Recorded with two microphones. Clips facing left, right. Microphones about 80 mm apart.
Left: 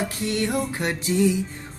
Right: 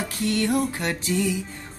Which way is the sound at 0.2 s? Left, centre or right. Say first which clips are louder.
Right 4 dB; left.